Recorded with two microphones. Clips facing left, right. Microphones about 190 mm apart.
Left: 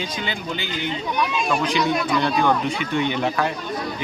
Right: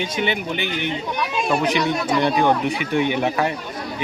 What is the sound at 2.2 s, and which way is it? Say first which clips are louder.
Speech: right 3 dB; 15° right (ahead or behind).